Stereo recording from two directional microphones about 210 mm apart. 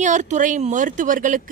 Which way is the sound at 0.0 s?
35° right (ahead or behind).